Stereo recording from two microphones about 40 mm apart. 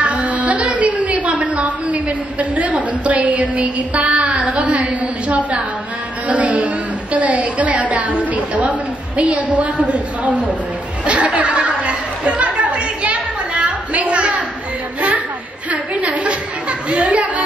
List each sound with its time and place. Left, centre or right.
0.0 s a woman's voice: right
11.1 s chatter: right
15.0 s a sound: right